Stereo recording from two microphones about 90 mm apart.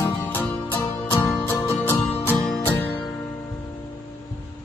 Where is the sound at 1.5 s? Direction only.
25° left (ahead or behind).